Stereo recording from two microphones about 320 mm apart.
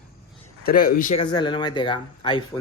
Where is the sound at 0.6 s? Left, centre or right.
Left.